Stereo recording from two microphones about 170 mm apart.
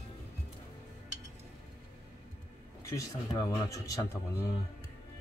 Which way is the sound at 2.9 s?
20° left (ahead or behind).